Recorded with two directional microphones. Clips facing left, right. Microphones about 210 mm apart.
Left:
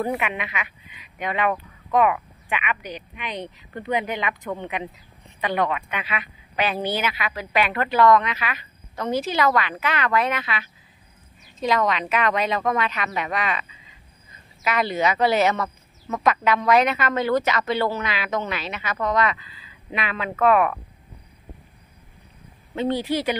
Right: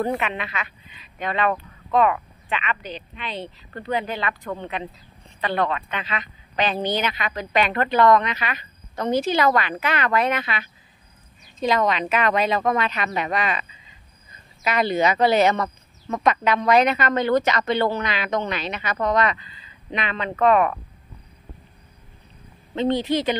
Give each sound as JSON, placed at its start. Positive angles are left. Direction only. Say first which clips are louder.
{"t": 0.0, "sound": "a woman's voice", "louder": "right 1 dB", "side_deg": 10}
{"t": 11.6, "sound": "a woman's voice", "louder": "right 1 dB", "side_deg": -25}
{"t": 14.7, "sound": "a woman's voice", "louder": "right 2 dB", "side_deg": 0}
{"t": 22.8, "sound": "speech", "louder": "right 2 dB", "side_deg": 10}